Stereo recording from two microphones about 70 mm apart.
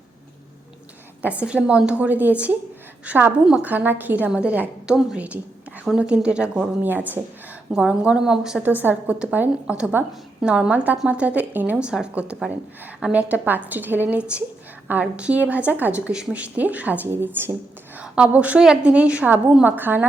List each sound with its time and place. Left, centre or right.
1.2 s a woman's voice: centre
4.9 s a woman's voice: centre
6.8 s a woman's voice: right
7.8 s a woman's voice: centre
8.6 s a woman's voice: right
10.4 s a woman's voice: centre
11.9 s a woman's voice: centre
17.1 s a woman's voice: right
18.0 s a woman's voice: centre
19.6 s a woman's voice: right